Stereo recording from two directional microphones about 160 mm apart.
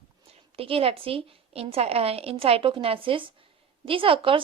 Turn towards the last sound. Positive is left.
turn(degrees=-35)  # may be behind; listen again after turning